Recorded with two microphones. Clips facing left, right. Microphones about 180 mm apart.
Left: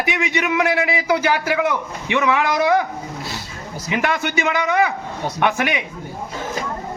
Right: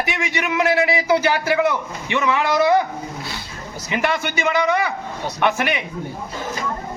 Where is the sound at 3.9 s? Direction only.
5° left (ahead or behind).